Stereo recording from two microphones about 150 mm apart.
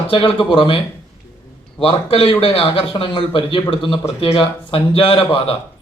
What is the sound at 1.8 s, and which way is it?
A man's voice, 35° left (ahead or behind).